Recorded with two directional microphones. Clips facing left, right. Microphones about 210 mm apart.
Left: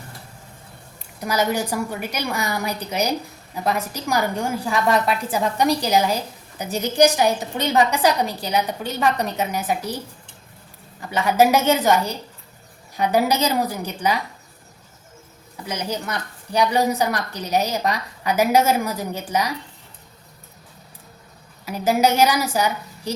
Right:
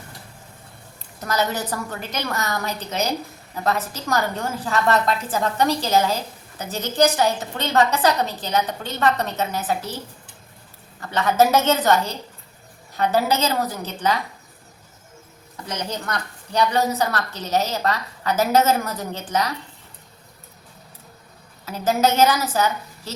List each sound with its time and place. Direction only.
1.2 s a woman's voice: 10° left (ahead or behind)
11.0 s a woman's voice: 10° left (ahead or behind)
15.5 s a woman's voice: 10° left (ahead or behind)
21.6 s a woman's voice: 10° left (ahead or behind)